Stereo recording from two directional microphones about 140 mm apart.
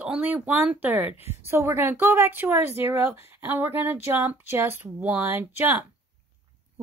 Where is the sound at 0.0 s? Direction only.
10° right (ahead or behind).